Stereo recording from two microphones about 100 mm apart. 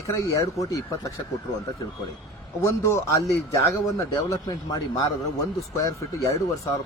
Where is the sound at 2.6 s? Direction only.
30° left (ahead or behind).